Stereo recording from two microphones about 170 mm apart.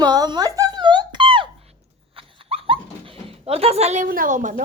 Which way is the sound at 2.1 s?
35° right (ahead or behind).